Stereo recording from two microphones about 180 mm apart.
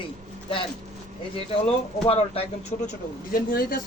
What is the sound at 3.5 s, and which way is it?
Speech, 55° left (ahead or behind).